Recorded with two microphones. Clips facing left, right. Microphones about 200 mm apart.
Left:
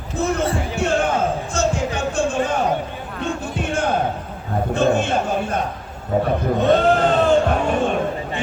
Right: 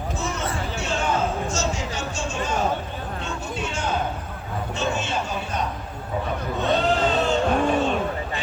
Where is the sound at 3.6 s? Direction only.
55° left (ahead or behind).